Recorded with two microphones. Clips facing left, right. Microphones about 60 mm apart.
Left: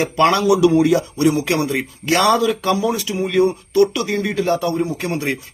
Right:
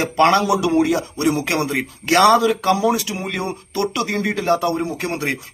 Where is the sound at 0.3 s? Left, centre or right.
Right.